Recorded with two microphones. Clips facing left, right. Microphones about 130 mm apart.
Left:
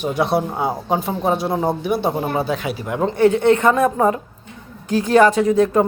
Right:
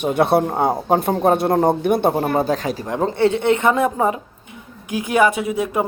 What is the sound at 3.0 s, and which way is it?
A woman's voice, 25° right (ahead or behind).